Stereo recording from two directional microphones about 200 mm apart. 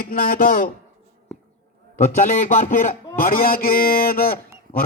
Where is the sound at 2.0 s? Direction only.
40° left (ahead or behind).